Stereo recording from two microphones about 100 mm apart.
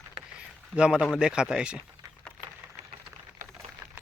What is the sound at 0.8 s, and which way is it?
A man's voice, 5° right (ahead or behind).